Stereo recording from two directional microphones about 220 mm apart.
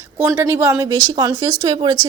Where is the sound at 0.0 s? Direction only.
10° right (ahead or behind).